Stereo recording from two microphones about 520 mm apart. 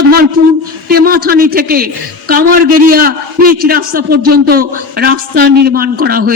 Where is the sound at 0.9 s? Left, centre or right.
Centre.